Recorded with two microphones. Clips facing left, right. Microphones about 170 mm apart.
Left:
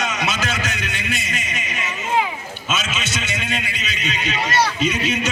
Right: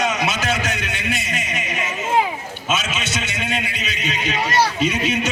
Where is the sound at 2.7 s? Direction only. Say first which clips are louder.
Right 2 dB; 60° right (ahead or behind).